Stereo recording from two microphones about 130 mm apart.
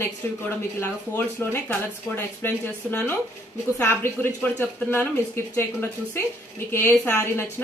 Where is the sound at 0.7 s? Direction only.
15° left (ahead or behind).